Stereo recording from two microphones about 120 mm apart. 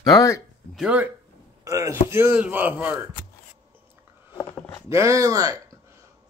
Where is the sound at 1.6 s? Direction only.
25° right (ahead or behind).